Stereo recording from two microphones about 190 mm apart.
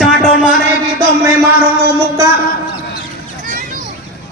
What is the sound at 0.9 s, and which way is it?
Music, 15° right (ahead or behind).